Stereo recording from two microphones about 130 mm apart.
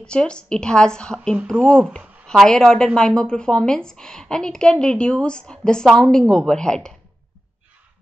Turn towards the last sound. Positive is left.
turn(degrees=5)  # may be behind; listen again after turning